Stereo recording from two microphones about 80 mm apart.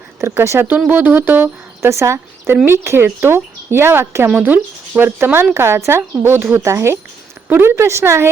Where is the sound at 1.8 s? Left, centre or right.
Right.